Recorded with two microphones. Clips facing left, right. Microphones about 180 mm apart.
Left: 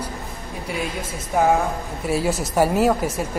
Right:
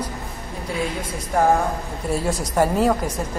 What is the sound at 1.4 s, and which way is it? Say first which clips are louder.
A woman's voice: even; 5° left (ahead or behind).